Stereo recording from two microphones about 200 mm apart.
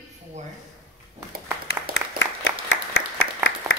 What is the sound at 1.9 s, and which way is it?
Applause, 65° left (ahead or behind).